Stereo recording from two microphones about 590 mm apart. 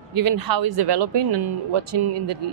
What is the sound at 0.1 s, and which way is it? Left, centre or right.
Speech, right.